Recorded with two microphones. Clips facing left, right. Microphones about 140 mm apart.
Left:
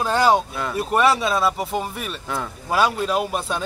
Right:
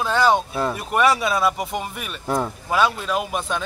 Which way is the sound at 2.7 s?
40° left (ahead or behind).